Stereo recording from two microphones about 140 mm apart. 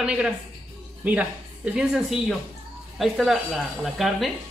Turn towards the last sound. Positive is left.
turn(degrees=0)  # may be behind; listen again after turning